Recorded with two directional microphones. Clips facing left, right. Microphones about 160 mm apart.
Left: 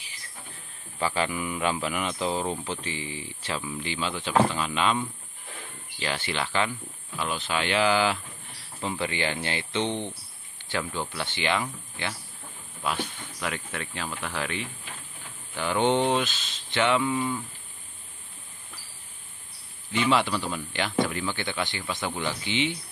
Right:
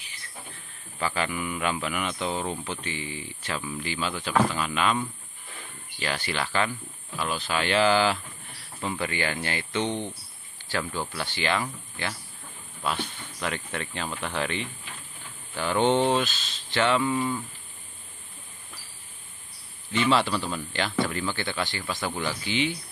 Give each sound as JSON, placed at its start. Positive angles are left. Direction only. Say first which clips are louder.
{"t": 1.0, "sound": "a man's voice", "louder": "left 1 dB", "side_deg": 30}
{"t": 2.3, "sound": "speech", "louder": "left 1 dB", "side_deg": 5}
{"t": 2.7, "sound": "speech", "louder": "even", "side_deg": 30}
{"t": 9.8, "sound": "speech", "louder": "even", "side_deg": -10}
{"t": 11.1, "sound": "speech", "louder": "even", "side_deg": 20}
{"t": 19.9, "sound": "speech", "louder": "right 1 dB", "side_deg": 15}